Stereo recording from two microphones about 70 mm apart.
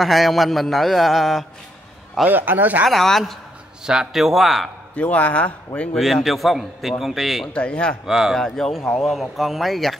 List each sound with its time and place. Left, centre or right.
0.0 s speech: centre
2.2 s a man's voice: right
2.9 s speech: centre
3.8 s speech: centre
4.9 s speech: left
6.2 s speech: centre
7.5 s speech: centre
8.0 s speech: centre
8.4 s speech: centre